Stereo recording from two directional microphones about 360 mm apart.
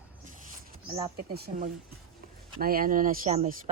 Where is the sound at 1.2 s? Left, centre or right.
Right.